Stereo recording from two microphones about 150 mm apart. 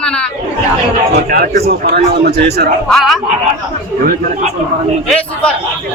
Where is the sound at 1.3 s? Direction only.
85° right.